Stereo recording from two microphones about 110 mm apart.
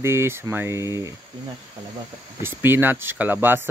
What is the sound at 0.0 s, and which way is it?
Speech, 25° right (ahead or behind).